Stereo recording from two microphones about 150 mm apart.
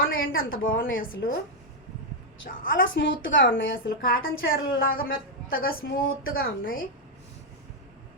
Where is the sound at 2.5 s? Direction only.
80° left.